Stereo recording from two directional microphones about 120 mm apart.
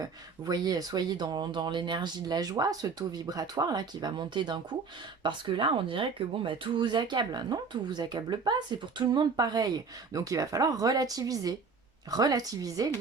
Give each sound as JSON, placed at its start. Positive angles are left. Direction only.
{"t": 0.0, "sound": "speech", "side_deg": -35}